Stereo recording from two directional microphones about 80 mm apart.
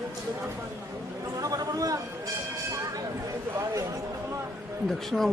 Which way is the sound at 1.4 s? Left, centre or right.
Right.